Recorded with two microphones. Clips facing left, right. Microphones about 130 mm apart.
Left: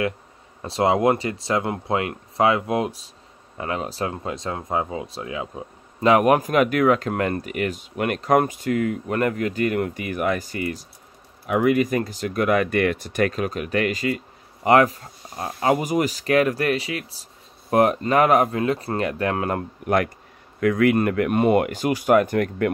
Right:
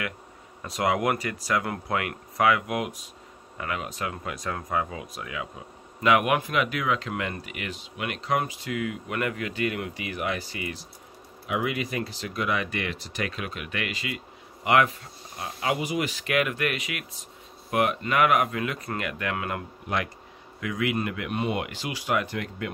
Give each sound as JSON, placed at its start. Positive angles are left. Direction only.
{"t": 0.6, "sound": "speech", "side_deg": 30}
{"t": 20.6, "sound": "speech", "side_deg": 55}